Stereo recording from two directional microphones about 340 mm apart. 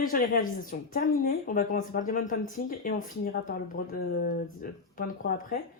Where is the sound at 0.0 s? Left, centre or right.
Left.